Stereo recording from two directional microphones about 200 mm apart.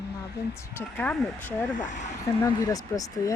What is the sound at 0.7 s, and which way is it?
Speech, 10° left (ahead or behind).